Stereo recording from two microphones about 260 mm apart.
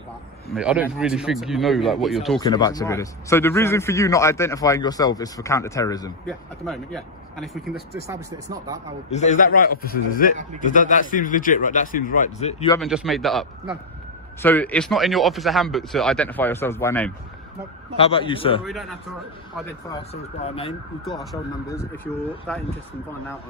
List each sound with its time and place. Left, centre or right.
0.5 s speech: centre
2.4 s a man's voice: centre
6.2 s speech: centre
8.0 s speech: centre
9.0 s a man's voice: left
12.8 s speech: centre
17.9 s a man's voice: left
18.6 s a man's voice: centre
20.4 s a man's voice: left
21.0 s a man's voice: centre